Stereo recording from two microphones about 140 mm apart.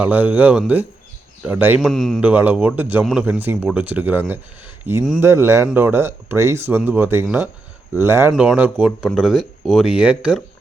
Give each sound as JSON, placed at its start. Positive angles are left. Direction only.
{"t": 0.0, "sound": "speech", "side_deg": -10}
{"t": 1.8, "sound": "speech", "side_deg": 0}
{"t": 2.2, "sound": "speech", "side_deg": -10}
{"t": 8.3, "sound": "speech", "side_deg": -5}